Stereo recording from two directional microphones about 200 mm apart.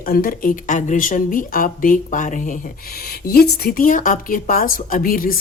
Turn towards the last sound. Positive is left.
turn(degrees=45)  # may be behind; listen again after turning